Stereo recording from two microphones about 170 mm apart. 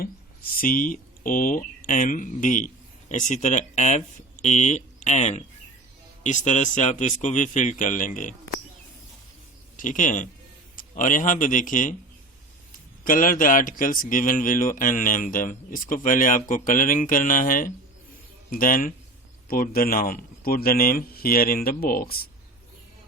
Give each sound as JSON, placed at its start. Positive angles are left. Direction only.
{"t": 0.0, "sound": "a man's voice", "side_deg": 60}
{"t": 9.7, "sound": "a man's voice", "side_deg": 50}
{"t": 13.1, "sound": "a man's voice", "side_deg": 50}